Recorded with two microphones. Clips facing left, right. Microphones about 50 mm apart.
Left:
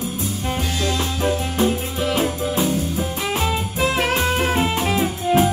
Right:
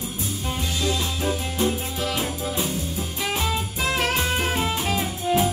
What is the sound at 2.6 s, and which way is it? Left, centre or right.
Music, left.